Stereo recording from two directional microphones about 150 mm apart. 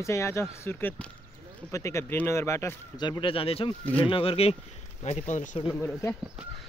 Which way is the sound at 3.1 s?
35° left (ahead or behind).